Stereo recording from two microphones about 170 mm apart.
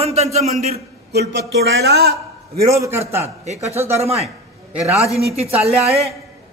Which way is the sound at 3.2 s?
40° right (ahead or behind).